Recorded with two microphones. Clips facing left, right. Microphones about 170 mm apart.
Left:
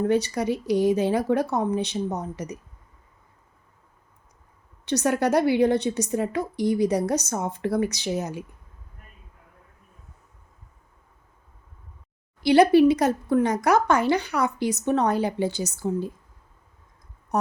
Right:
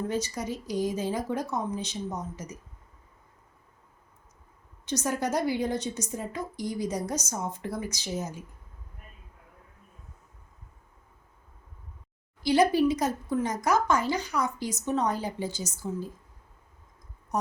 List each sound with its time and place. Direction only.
0.0 s speech: 65° left (ahead or behind)
4.9 s a woman's voice: 65° left (ahead or behind)
12.4 s speech: 70° left (ahead or behind)
17.3 s speech: 65° left (ahead or behind)